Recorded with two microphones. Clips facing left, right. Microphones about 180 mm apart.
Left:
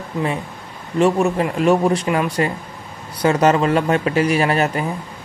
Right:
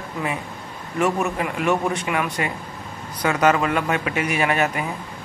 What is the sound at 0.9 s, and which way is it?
Speech, 30° left (ahead or behind).